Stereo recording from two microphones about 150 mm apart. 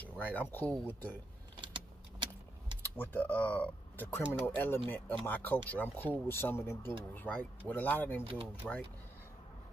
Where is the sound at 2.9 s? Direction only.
15° left (ahead or behind).